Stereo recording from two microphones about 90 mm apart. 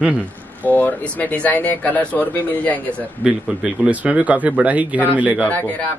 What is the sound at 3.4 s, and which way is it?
Speech, 10° right (ahead or behind).